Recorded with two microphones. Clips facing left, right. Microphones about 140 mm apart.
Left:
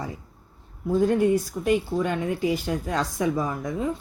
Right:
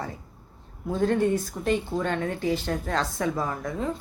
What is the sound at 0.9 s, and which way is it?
Speech, 10° left (ahead or behind).